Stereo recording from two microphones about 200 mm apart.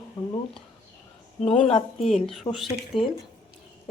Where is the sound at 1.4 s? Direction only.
5° left (ahead or behind).